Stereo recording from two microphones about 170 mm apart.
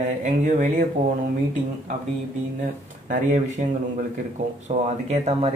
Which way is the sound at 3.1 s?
45° right (ahead or behind).